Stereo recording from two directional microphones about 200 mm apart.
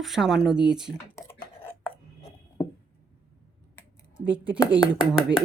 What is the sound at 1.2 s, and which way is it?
Beatboxing, 15° left (ahead or behind).